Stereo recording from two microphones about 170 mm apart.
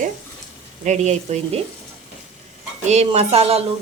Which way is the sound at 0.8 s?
45° right (ahead or behind).